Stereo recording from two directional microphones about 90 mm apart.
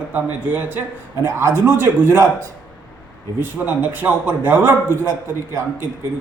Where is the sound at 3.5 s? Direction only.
20° right (ahead or behind).